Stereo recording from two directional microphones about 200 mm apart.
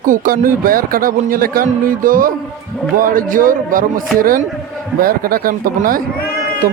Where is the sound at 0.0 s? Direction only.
40° right (ahead or behind).